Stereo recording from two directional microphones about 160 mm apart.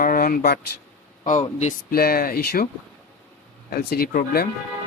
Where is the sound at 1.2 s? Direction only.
50° left (ahead or behind).